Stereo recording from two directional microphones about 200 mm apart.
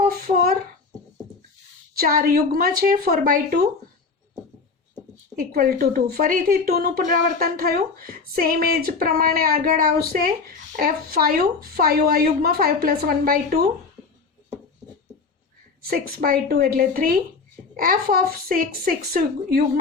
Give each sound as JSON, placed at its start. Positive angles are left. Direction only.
{"t": 0.1, "sound": "a sound", "side_deg": -50}
{"t": 2.0, "sound": "a woman's voice", "side_deg": -45}
{"t": 5.4, "sound": "a woman's voice", "side_deg": -45}
{"t": 15.9, "sound": "a woman's voice", "side_deg": -45}